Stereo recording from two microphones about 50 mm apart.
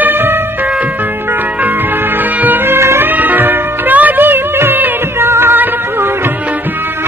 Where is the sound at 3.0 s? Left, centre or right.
Right.